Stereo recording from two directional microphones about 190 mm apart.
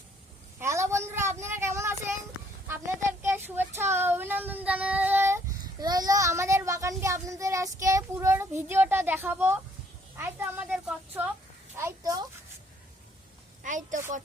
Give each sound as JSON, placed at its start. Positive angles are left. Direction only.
{"t": 0.6, "sound": "a sound", "side_deg": -15}
{"t": 1.4, "sound": "child singing", "side_deg": -15}
{"t": 2.6, "sound": "a child's voice", "side_deg": -10}
{"t": 11.8, "sound": "speech", "side_deg": -15}
{"t": 13.6, "sound": "a woman's voice", "side_deg": -40}